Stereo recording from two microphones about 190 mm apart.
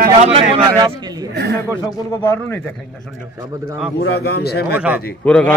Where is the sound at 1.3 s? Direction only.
55° right (ahead or behind).